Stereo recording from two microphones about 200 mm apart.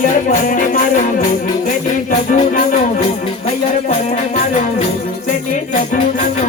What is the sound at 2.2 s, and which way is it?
Music, 40° left (ahead or behind).